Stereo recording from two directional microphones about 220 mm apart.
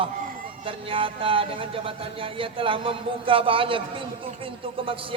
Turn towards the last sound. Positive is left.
turn(degrees=-25)  # may be behind; listen again after turning